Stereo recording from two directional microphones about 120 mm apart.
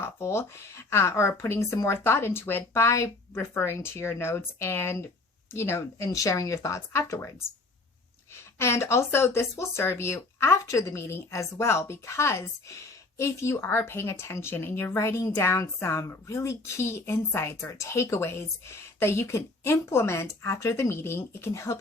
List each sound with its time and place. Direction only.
0.0 s speech: 20° left (ahead or behind)
8.5 s speech: 20° left (ahead or behind)